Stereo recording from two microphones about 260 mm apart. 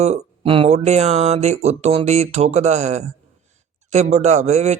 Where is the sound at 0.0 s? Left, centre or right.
Right.